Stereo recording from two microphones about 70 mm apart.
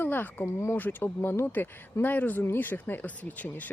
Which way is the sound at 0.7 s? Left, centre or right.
Left.